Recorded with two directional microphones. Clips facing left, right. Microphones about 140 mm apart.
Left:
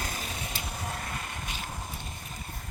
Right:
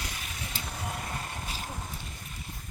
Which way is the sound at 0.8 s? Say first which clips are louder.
Right 1 dB; 5° right (ahead or behind).